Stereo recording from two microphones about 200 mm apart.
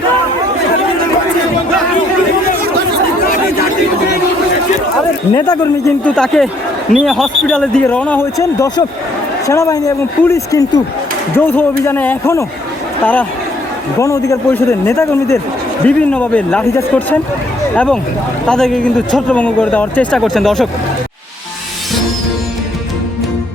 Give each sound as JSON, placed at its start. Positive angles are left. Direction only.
{"t": 5.3, "sound": "speech", "side_deg": 15}
{"t": 6.1, "sound": "speech", "side_deg": 0}
{"t": 14.0, "sound": "speech", "side_deg": 15}